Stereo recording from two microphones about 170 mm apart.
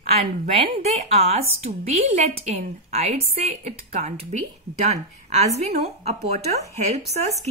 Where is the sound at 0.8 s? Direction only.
35° right (ahead or behind).